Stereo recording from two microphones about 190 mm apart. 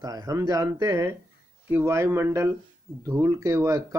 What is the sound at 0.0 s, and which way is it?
Speech, 20° right (ahead or behind).